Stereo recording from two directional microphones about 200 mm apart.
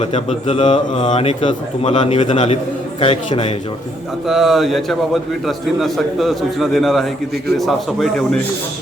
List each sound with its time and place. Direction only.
0.0 s a man's voice: 30° left (ahead or behind)
4.3 s a man's voice: centre (ahead or behind)